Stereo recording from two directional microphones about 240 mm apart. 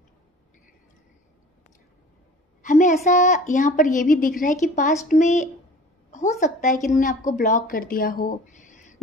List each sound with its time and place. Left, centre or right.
2.6 s a woman's voice: left